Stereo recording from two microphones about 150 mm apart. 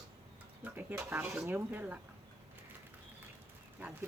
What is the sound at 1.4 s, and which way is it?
Speech, 15° right (ahead or behind).